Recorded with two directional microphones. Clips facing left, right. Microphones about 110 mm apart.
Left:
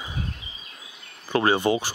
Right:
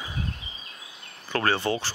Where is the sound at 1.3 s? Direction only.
15° left (ahead or behind).